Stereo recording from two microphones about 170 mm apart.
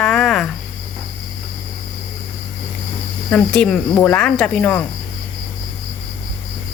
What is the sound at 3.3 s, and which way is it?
Speech, 5° left (ahead or behind).